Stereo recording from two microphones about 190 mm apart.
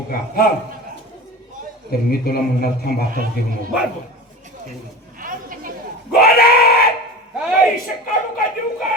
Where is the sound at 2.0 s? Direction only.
50° left (ahead or behind).